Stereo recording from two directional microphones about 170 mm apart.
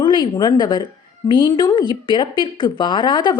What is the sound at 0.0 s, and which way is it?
A woman's voice, 30° left (ahead or behind).